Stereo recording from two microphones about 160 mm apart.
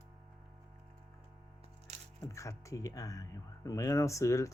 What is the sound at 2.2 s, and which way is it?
Speech, 20° left (ahead or behind).